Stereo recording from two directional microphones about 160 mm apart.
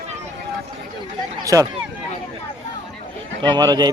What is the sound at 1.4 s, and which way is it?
Speech, 20° right (ahead or behind).